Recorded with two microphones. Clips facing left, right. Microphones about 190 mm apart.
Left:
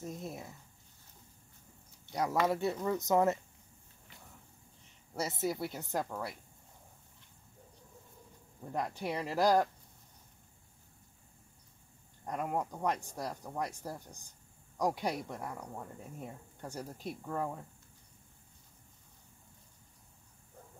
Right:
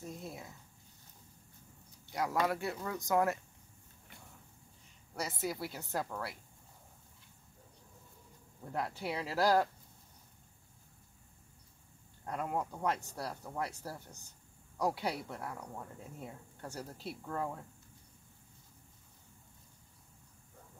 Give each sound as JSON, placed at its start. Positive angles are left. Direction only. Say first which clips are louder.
{"t": 0.0, "sound": "a woman's voice", "louder": "left 3 dB", "side_deg": 20}
{"t": 2.1, "sound": "a woman's voice", "louder": "left 2 dB", "side_deg": 20}
{"t": 5.1, "sound": "a woman's voice", "louder": "left 3 dB", "side_deg": 25}
{"t": 8.7, "sound": "speech", "louder": "left 2 dB", "side_deg": 15}
{"t": 12.3, "sound": "speech", "louder": "left 1 dB", "side_deg": 15}